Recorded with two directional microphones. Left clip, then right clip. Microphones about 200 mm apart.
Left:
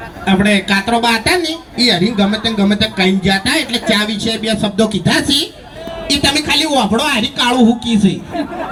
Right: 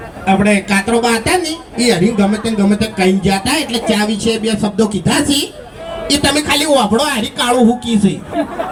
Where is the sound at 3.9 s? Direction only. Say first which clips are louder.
Even; 30° left (ahead or behind).